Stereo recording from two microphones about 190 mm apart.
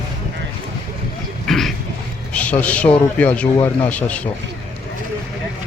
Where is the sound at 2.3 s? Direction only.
5° left (ahead or behind).